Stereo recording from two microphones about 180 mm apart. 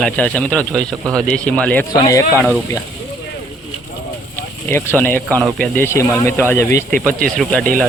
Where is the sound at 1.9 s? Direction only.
20° left (ahead or behind).